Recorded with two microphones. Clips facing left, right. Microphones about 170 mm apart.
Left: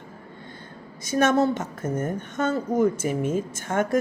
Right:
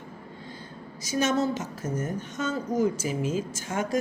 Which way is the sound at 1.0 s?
55° left (ahead or behind).